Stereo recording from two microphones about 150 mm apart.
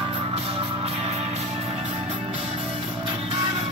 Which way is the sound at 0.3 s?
40° right (ahead or behind).